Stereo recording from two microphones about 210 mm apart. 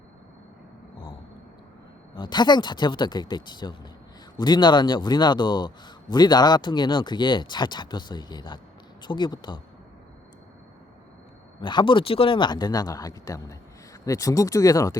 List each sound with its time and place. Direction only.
2.1 s a man's voice: 20° left (ahead or behind)
11.6 s a man's voice: 20° left (ahead or behind)